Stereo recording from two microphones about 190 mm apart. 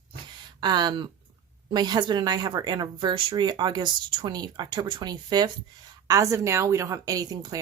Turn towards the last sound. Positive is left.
turn(degrees=-20)  # may be behind; listen again after turning